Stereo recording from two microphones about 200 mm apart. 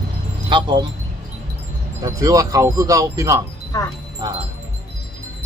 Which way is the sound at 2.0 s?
15° right (ahead or behind).